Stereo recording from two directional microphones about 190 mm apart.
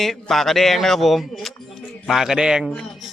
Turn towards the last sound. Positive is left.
turn(degrees=0)  # may be behind; listen again after turning